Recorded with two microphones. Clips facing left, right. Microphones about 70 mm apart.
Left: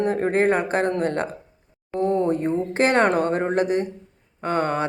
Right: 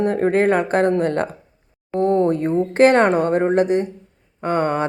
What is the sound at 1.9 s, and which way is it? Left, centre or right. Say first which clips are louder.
Speech: right 4 dB; right.